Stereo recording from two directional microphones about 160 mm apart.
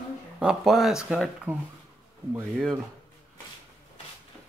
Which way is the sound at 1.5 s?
15° right (ahead or behind).